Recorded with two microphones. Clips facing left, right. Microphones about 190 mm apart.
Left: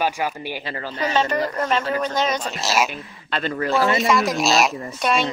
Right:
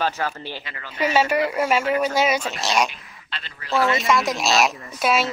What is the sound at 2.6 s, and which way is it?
Speech, 5° left (ahead or behind).